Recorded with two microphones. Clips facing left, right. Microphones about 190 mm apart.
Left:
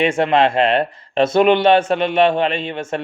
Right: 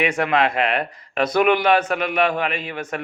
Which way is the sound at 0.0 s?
25° left (ahead or behind).